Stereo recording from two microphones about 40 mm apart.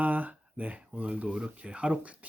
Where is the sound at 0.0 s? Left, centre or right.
Right.